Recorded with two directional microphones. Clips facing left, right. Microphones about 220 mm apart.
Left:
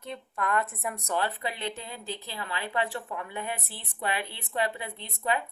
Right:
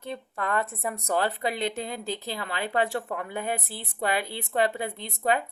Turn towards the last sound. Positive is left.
turn(degrees=-45)  # may be behind; listen again after turning